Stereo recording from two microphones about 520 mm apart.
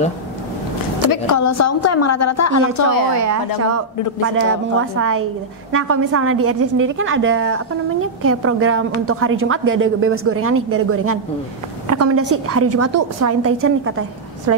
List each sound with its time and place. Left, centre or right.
1.1 s a woman's voice: left
3.2 s a woman's voice: right